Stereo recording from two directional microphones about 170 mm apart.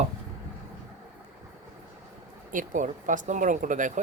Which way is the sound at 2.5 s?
50° right (ahead or behind).